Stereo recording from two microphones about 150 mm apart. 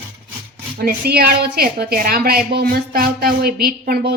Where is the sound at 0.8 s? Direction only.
90° right.